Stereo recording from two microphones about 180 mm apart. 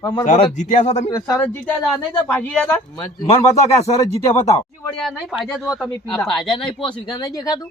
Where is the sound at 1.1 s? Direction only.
15° left (ahead or behind).